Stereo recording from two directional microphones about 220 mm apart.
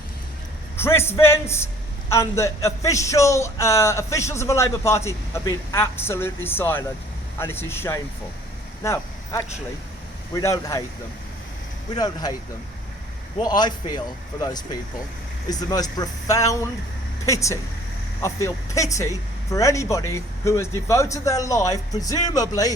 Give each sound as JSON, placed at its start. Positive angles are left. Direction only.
{"t": 0.8, "sound": "speech", "side_deg": 10}
{"t": 8.8, "sound": "vehicle", "side_deg": 15}
{"t": 10.3, "sound": "speech", "side_deg": 15}
{"t": 11.9, "sound": "speech", "side_deg": 20}
{"t": 13.4, "sound": "a man's voice", "side_deg": 20}